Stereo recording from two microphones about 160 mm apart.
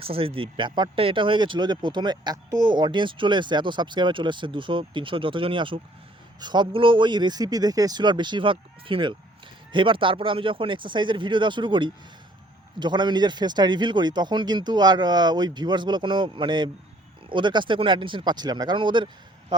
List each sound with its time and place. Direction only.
0.0 s a man's voice: 35° right (ahead or behind)